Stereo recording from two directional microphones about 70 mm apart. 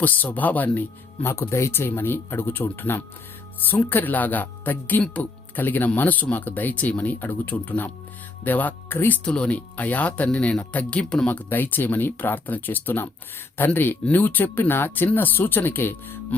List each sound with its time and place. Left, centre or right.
0.0 s speech: left
1.3 s speech: left
9.2 s speech: centre
11.3 s speech: left